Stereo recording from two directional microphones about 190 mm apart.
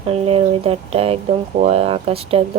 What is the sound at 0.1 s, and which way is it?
Speech, 30° right (ahead or behind).